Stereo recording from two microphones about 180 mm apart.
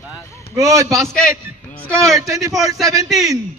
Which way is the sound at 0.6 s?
20° right (ahead or behind).